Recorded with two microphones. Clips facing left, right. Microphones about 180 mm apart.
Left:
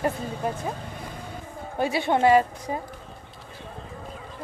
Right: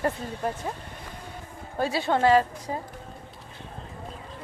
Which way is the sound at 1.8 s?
20° left (ahead or behind).